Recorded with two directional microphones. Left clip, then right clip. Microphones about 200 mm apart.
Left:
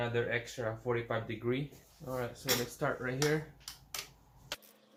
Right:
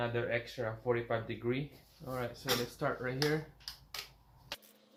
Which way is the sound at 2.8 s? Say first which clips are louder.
Left 1 dB; 10° left (ahead or behind).